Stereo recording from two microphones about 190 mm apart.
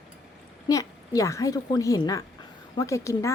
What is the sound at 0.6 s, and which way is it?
Speech, 15° left (ahead or behind).